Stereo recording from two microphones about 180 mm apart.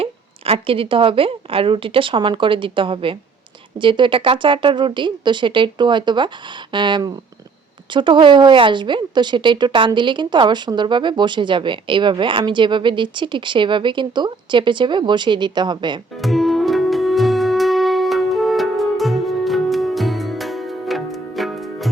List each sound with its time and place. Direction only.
0.0 s speech: 30° right (ahead or behind)
16.2 s music: centre (ahead or behind)